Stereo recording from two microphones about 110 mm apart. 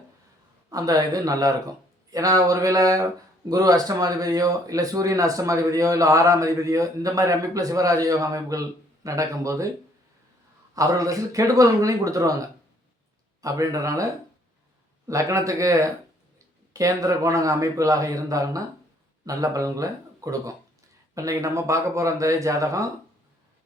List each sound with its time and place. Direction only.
0.7 s speech: 35° right (ahead or behind)
10.8 s speech: 30° right (ahead or behind)